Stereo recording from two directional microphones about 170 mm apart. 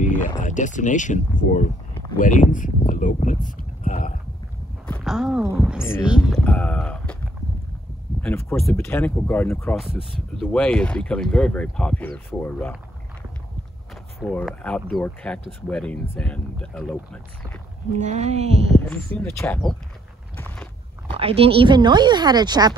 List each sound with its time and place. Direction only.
0.0 s a sound: 50° left (ahead or behind)
0.4 s speech: 45° left (ahead or behind)
5.0 s speech: 5° right (ahead or behind)
5.8 s speech: 15° left (ahead or behind)
6.0 s speech: 5° right (ahead or behind)
6.4 s boat: 5° left (ahead or behind)
8.2 s speech: 10° left (ahead or behind)
9.8 s speech: centre (ahead or behind)
14.3 s speech: 5° left (ahead or behind)
17.9 s speech: 40° right (ahead or behind)
18.7 s speech: 10° left (ahead or behind)
21.1 s speech: 35° right (ahead or behind)